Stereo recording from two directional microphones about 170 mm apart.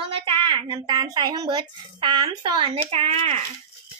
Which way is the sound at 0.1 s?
30° right (ahead or behind).